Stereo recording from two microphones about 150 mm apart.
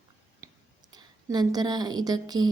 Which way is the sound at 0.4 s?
25° right (ahead or behind).